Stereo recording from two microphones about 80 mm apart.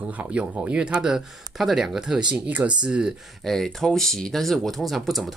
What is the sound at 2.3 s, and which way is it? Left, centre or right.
Speech, centre.